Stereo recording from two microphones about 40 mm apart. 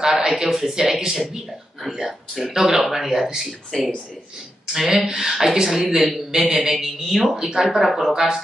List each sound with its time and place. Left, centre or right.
0.0 s speech: centre
4.7 s a man's voice: centre
7.7 s a man's voice: centre
8.1 s speech: centre